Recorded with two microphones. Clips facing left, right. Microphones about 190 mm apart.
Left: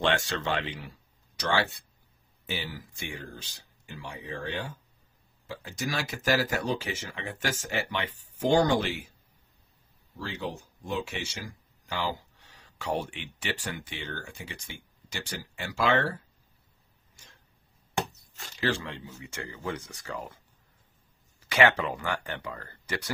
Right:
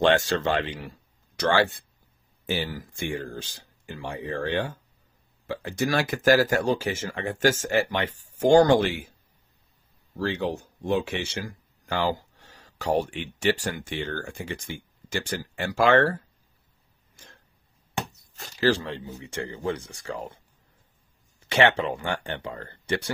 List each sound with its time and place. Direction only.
0.0 s speech: 45° right (ahead or behind)
10.1 s speech: 65° right (ahead or behind); by 16.2 s 50° right (ahead or behind)
18.6 s speech: 35° right (ahead or behind)
21.5 s speech: 30° right (ahead or behind)